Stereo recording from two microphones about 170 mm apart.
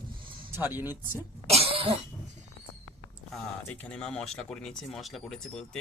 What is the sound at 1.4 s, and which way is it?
Cough, 35° right (ahead or behind).